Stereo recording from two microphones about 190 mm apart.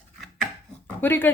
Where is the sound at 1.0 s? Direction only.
10° left (ahead or behind).